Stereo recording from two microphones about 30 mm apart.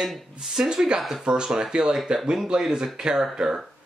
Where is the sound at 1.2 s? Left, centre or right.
Right.